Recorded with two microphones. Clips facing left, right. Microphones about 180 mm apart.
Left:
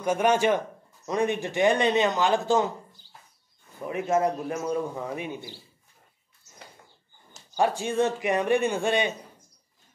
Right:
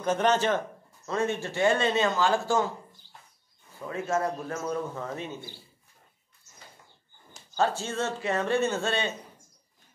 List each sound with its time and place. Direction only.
0.0 s a man's voice: 10° left (ahead or behind)
3.8 s a man's voice: 20° left (ahead or behind)
7.5 s a man's voice: 15° left (ahead or behind)